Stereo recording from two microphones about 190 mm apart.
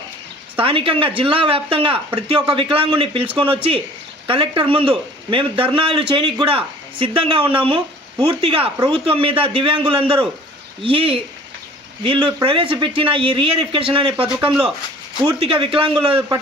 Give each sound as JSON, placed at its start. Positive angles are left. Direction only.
{"t": 0.5, "sound": "a man's voice", "side_deg": -30}